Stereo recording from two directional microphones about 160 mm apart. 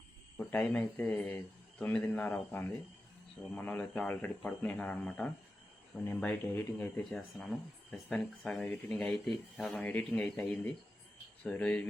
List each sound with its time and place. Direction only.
0.3 s speech: 10° left (ahead or behind)
7.1 s speech: centre (ahead or behind)